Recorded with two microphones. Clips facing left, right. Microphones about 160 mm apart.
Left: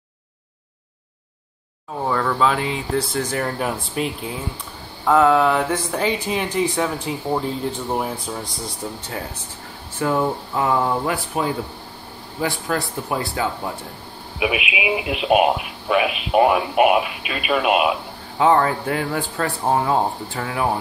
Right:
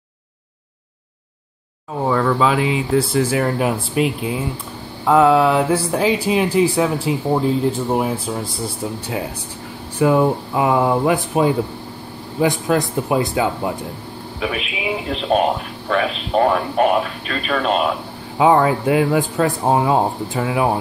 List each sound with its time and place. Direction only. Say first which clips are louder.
2.0 s speech: right 3 dB; 5° right (ahead or behind)
9.9 s speech: right 6 dB; 15° right (ahead or behind)
14.4 s speech: left 2 dB; 10° left (ahead or behind)
18.4 s speech: right 3 dB; 15° right (ahead or behind)